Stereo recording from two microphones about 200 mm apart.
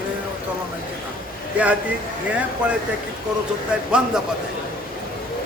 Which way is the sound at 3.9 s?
5° right (ahead or behind).